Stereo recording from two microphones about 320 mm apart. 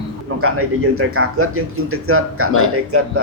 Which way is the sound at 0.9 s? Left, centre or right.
Right.